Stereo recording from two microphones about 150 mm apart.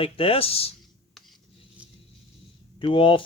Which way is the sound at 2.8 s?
35° left (ahead or behind).